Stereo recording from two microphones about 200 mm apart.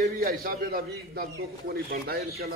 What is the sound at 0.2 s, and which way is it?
A man's voice, 50° right (ahead or behind).